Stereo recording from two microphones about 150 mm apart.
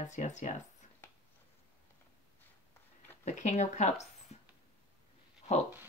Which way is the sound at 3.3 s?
50° left (ahead or behind).